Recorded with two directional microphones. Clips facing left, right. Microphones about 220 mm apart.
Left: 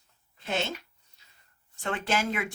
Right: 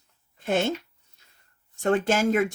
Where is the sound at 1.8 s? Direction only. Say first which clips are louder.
Right 8 dB; 45° right (ahead or behind).